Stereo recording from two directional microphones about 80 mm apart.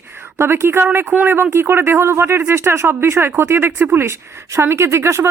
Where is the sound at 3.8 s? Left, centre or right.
Right.